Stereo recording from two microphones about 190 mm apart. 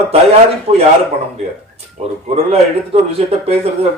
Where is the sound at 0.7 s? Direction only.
30° right (ahead or behind).